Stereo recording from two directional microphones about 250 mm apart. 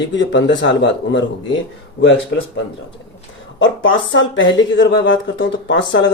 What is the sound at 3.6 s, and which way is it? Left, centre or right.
Speech, left.